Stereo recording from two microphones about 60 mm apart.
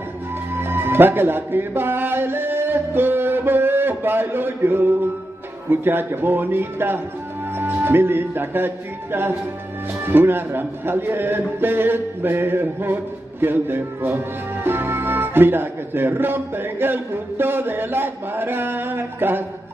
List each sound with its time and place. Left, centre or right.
0.6 s music: right
5.7 s a man's voice: right